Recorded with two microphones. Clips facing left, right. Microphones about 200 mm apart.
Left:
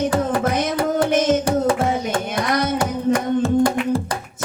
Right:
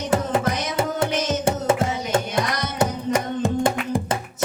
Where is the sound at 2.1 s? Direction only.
25° right (ahead or behind).